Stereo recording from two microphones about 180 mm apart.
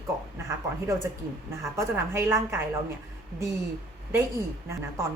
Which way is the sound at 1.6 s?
15° right (ahead or behind).